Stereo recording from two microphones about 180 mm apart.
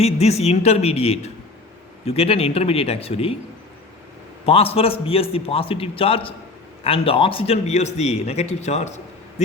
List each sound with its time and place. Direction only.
0.0 s a man's voice: 35° left (ahead or behind)
4.4 s a man's voice: 35° left (ahead or behind)